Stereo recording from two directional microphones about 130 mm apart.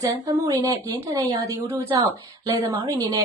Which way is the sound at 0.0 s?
25° right (ahead or behind).